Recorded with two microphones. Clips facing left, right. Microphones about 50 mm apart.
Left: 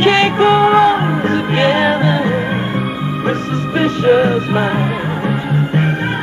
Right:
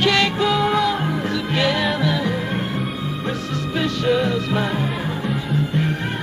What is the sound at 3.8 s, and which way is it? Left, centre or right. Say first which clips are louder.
Music: left 8 dB; left.